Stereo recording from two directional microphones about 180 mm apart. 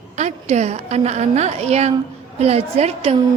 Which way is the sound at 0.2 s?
40° right (ahead or behind).